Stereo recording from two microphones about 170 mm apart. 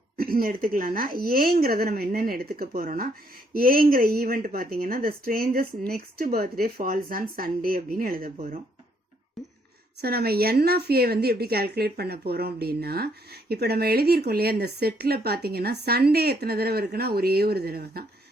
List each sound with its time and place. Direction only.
0.2 s speech: 60° right (ahead or behind)
10.0 s a woman's voice: 65° right (ahead or behind)